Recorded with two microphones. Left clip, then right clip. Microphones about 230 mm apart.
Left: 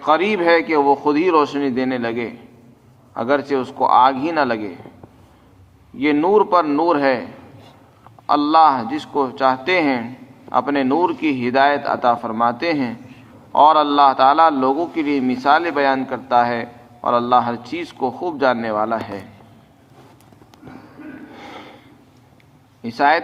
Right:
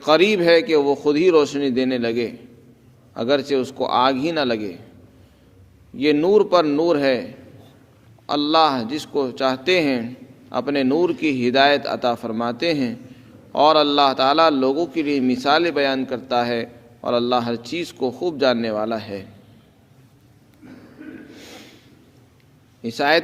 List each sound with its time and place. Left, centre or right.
0.0 s a man's voice: right
6.0 s a man's voice: right
8.3 s a man's voice: right
21.3 s snort: right
22.8 s a man's voice: right